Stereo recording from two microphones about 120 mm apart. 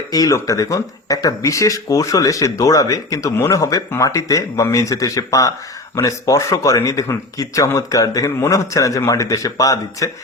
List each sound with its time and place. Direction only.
0.1 s speech: 30° left (ahead or behind)